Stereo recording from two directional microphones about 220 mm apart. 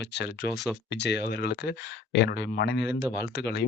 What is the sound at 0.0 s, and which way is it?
Speech, 50° left (ahead or behind).